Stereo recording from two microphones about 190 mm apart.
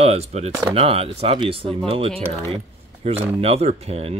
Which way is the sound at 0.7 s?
30° right (ahead or behind).